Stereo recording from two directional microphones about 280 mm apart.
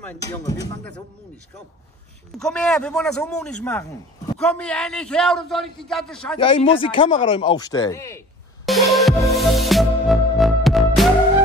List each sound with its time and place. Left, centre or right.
0.0 s speech: centre
2.3 s a man's voice: centre
6.3 s speech: centre
8.6 s music: centre